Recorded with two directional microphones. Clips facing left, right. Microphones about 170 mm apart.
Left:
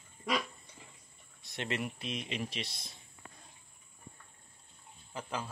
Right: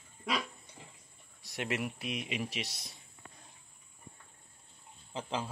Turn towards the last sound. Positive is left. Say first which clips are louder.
# right 2 dB
turn(degrees=-25)  # may be behind; listen again after turning